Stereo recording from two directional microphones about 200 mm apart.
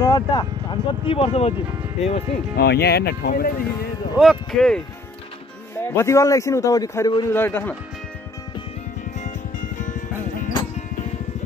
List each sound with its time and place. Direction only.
0.0 s speech: 20° left (ahead or behind)
2.5 s speech: 55° left (ahead or behind)
4.2 s a man's voice: centre (ahead or behind)
9.2 s music: 40° left (ahead or behind)